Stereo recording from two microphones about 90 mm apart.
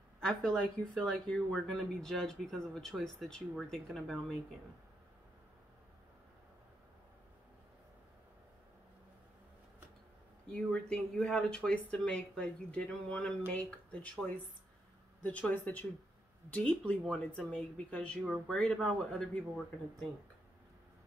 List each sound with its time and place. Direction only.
0.2 s speech: 5° left (ahead or behind)
10.4 s speech: 10° left (ahead or behind)
15.2 s speech: 20° left (ahead or behind)